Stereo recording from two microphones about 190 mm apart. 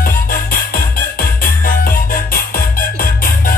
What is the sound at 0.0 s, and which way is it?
Music, 50° left (ahead or behind).